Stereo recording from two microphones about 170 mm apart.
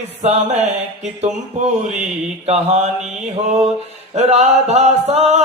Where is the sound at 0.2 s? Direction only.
40° right (ahead or behind).